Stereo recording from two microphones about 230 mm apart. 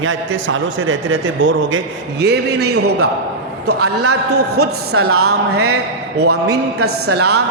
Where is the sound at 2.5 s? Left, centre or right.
Right.